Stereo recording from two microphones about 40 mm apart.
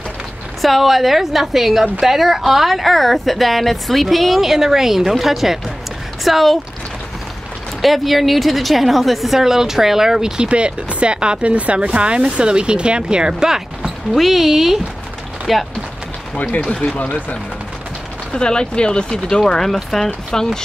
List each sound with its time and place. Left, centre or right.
0.6 s a woman's voice: centre
7.8 s a woman's voice: centre
9.4 s speech: centre
14.1 s a woman's voice: centre
16.6 s speech: left
18.3 s speech: left